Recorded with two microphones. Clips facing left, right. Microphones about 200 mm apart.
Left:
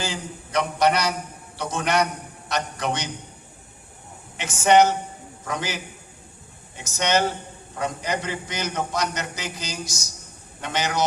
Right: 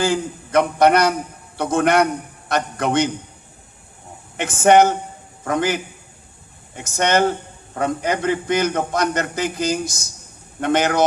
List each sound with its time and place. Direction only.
0.0 s a man's voice: 55° right (ahead or behind)
4.4 s a man's voice: 55° right (ahead or behind)